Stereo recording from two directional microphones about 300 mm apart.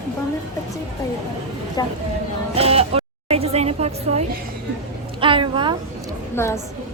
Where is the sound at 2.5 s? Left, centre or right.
Centre.